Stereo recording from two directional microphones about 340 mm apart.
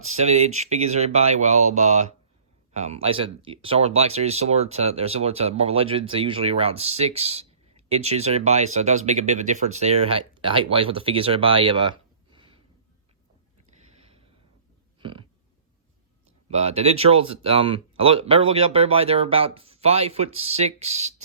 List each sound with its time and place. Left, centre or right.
0.0 s speech: centre
14.0 s a sound: centre
16.5 s speech: centre